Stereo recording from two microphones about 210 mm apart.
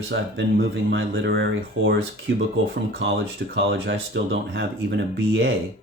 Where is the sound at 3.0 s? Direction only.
60° right (ahead or behind).